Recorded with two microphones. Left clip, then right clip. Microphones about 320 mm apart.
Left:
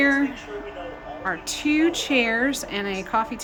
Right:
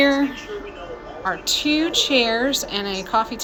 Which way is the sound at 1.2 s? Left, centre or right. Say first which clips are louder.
Right 5 dB; centre.